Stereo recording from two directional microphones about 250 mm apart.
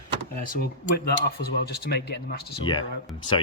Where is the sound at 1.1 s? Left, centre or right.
Left.